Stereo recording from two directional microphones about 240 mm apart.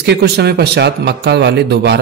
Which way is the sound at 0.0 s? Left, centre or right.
Right.